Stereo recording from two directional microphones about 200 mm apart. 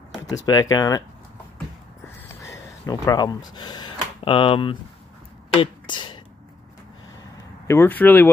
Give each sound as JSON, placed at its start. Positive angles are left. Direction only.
{"t": 0.5, "sound": "speech", "side_deg": 20}
{"t": 2.4, "sound": "speech", "side_deg": 15}
{"t": 5.6, "sound": "a sound", "side_deg": 25}
{"t": 7.6, "sound": "speech", "side_deg": 10}